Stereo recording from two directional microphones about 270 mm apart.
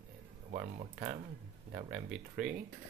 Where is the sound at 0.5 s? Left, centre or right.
Right.